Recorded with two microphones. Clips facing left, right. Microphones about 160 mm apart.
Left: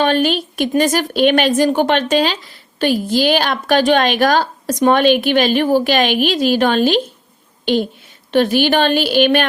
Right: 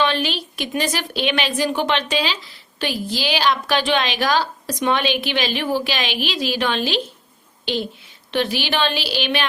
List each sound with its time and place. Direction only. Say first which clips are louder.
0.0 s a woman's voice: left 6 dB; 45° left (ahead or behind)